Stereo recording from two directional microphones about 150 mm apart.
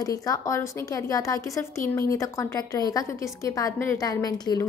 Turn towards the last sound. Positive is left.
turn(degrees=25)  # may be behind; listen again after turning